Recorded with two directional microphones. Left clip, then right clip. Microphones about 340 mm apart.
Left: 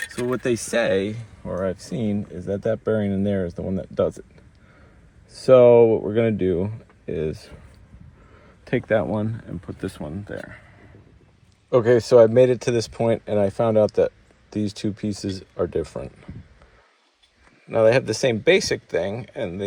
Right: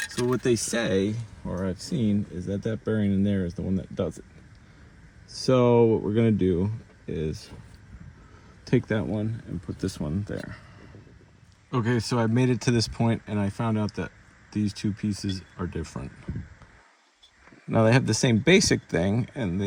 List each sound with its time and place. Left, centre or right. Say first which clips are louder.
0.3 s speech: left 6 dB; centre
5.4 s speech: left 8 dB; centre
8.6 s speech: left 6 dB; centre
11.7 s speech: left 13 dB; centre
17.7 s speech: left 5 dB; centre